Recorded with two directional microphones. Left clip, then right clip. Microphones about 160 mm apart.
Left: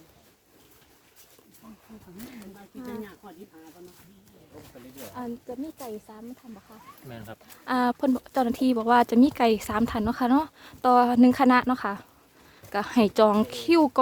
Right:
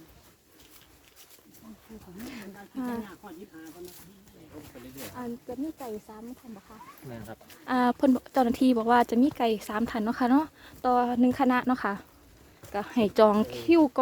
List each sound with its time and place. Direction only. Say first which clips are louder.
2.7 s speech: right 4 dB; 45° right (ahead or behind)
5.1 s a woman's voice: left 2 dB; 10° left (ahead or behind)
7.6 s speech: even; centre (ahead or behind)
9.2 s a woman's voice: left 4 dB; 20° left (ahead or behind)
11.7 s speech: left 1 dB; centre (ahead or behind)
12.7 s a woman's voice: left 4 dB; 20° left (ahead or behind)
13.1 s a woman's voice: right 2 dB; 5° left (ahead or behind)